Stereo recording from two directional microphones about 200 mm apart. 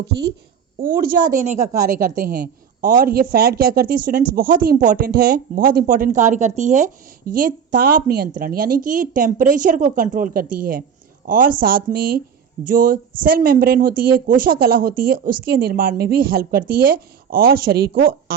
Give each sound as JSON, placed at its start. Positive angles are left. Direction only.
{"t": 0.8, "sound": "speech", "side_deg": -45}